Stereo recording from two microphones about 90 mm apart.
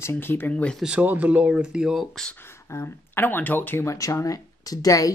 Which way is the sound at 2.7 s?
25° left (ahead or behind).